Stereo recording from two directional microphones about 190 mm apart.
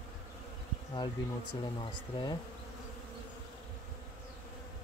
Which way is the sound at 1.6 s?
25° left (ahead or behind).